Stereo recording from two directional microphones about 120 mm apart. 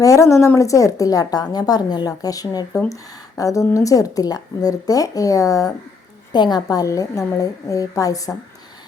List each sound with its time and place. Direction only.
0.0 s a woman's voice: 25° left (ahead or behind)